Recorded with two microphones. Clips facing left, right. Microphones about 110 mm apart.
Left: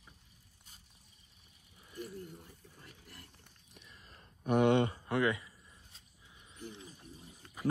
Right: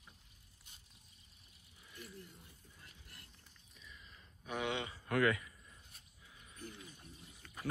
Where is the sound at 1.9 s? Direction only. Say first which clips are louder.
Left 9 dB; 45° left (ahead or behind).